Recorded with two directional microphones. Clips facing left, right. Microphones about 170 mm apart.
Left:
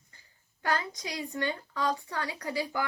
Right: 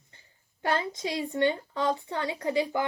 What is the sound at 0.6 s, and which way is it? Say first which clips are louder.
A woman's voice: right 3 dB; 25° right (ahead or behind).